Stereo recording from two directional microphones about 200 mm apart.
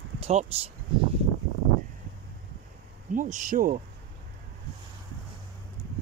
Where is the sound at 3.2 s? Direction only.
40° right (ahead or behind).